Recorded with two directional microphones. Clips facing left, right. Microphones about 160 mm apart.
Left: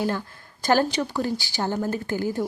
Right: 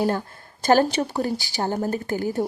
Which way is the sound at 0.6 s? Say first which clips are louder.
Right 3 dB; 20° right (ahead or behind).